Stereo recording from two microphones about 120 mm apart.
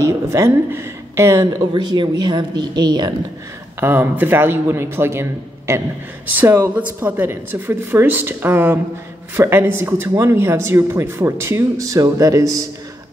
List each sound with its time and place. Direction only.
0.3 s speech: 20° right (ahead or behind)
3.8 s a woman's voice: 15° right (ahead or behind)